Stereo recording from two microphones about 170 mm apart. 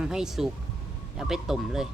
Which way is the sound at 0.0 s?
5° right (ahead or behind).